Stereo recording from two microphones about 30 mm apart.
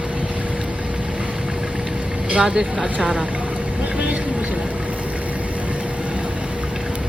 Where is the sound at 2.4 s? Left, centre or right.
Centre.